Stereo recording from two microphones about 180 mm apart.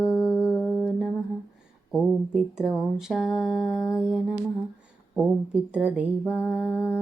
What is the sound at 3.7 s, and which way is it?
Music, 15° left (ahead or behind).